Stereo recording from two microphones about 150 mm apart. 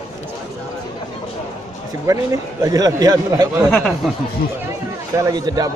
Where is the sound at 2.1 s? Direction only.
25° right (ahead or behind).